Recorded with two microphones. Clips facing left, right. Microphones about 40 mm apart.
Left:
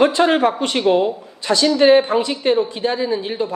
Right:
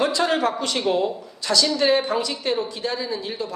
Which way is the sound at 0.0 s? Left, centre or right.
Left.